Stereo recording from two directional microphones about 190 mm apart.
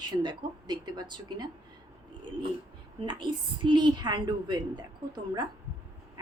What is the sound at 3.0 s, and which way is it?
A woman's voice, 25° right (ahead or behind).